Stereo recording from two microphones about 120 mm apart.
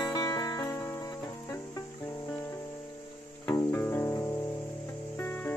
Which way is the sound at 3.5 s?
20° left (ahead or behind).